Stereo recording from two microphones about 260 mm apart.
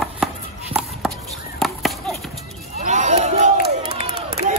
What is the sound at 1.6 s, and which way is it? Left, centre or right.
Chop, centre.